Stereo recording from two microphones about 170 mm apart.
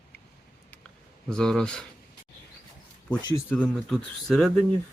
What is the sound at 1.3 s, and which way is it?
Speech, 5° left (ahead or behind).